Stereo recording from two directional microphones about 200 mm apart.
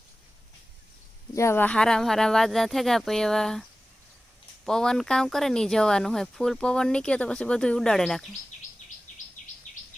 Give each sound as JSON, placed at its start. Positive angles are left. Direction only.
{"t": 1.3, "sound": "speech", "side_deg": 15}